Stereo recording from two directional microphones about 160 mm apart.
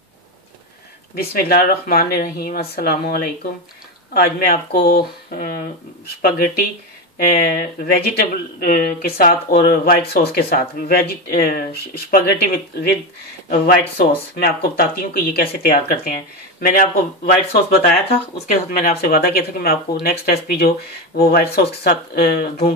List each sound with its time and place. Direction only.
1.1 s speech: 70° left (ahead or behind)